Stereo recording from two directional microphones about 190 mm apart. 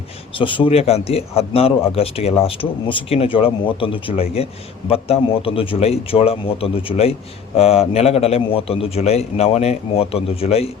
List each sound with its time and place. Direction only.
0.3 s speech: 25° left (ahead or behind)